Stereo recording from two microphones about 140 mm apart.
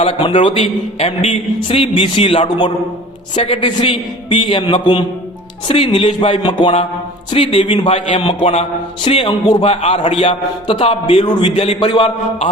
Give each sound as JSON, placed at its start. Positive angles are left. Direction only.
{"t": 0.0, "sound": "a man's voice", "side_deg": 40}
{"t": 1.6, "sound": "a man's voice", "side_deg": 40}
{"t": 5.9, "sound": "music", "side_deg": 55}
{"t": 6.1, "sound": "a man's voice", "side_deg": 40}